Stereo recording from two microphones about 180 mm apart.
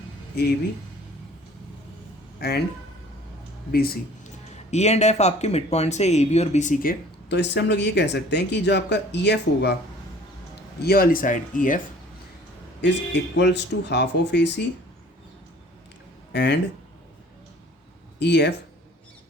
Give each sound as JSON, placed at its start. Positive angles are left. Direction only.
{"t": 0.4, "sound": "speech", "side_deg": 60}
{"t": 3.7, "sound": "speech", "side_deg": 55}
{"t": 4.5, "sound": "speech", "side_deg": 40}
{"t": 7.3, "sound": "speech", "side_deg": 70}
{"t": 10.8, "sound": "speech", "side_deg": 55}
{"t": 12.8, "sound": "speech", "side_deg": 70}
{"t": 16.3, "sound": "speech", "side_deg": 70}
{"t": 18.2, "sound": "speech", "side_deg": 70}